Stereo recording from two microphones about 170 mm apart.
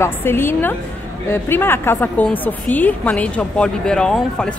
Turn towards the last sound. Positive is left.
turn(degrees=5)  # may be behind; listen again after turning